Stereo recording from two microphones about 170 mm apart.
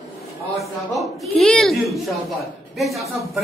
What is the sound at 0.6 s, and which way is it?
A child's voice, centre (ahead or behind).